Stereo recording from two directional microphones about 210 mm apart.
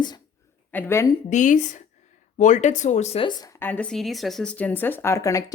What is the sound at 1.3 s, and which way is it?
Speech, 35° left (ahead or behind).